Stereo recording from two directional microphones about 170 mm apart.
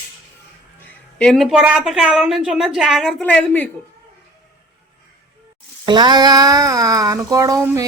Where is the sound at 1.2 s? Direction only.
Centre (ahead or behind).